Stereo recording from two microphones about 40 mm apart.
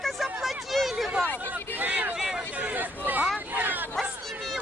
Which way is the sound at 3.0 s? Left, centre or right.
Right.